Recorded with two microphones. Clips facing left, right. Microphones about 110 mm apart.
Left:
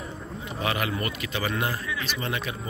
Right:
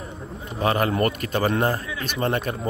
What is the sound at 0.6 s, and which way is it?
A man's voice, 40° right (ahead or behind).